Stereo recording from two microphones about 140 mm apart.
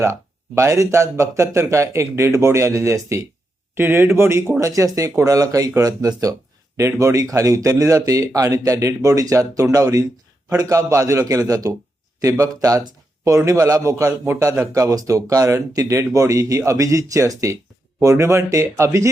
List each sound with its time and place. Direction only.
0.0 s speech: 20° right (ahead or behind)